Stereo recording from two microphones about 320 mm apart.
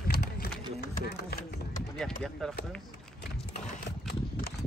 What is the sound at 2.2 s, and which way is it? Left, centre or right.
Speech, centre.